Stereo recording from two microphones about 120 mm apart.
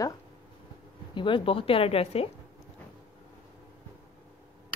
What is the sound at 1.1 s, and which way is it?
A woman's voice, 45° left (ahead or behind).